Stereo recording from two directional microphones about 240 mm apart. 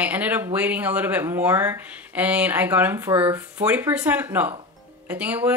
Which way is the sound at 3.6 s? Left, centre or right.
Centre.